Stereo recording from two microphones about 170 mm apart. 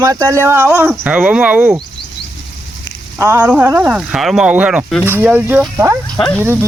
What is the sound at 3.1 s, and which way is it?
Speech, 15° right (ahead or behind).